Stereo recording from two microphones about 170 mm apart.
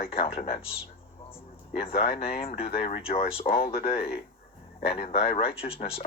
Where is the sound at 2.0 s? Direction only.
35° left (ahead or behind).